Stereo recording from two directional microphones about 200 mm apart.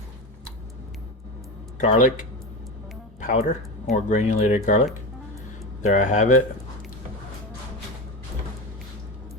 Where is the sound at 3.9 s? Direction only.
35° left (ahead or behind).